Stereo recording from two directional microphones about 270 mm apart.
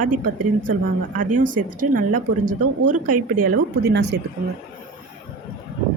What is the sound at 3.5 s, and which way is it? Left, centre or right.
Speech, right.